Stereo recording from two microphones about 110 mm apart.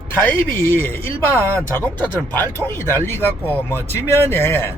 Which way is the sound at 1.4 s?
25° right (ahead or behind).